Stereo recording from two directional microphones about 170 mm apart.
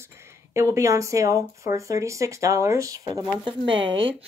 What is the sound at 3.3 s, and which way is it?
Speech, 10° left (ahead or behind).